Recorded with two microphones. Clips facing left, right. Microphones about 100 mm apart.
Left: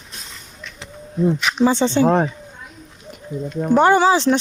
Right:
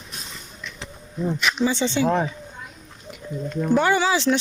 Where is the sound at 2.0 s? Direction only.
60° left (ahead or behind).